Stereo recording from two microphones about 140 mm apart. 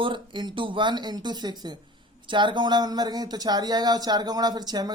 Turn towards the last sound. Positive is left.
turn(degrees=-30)  # may be behind; listen again after turning